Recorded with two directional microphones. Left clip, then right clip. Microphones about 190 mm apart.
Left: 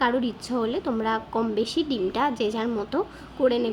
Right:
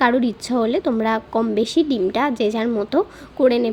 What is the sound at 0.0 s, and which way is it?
Speech, 25° right (ahead or behind).